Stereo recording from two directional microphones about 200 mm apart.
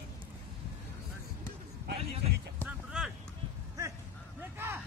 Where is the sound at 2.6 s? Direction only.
5° right (ahead or behind).